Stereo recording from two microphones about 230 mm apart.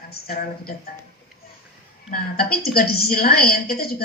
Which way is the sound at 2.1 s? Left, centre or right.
Left.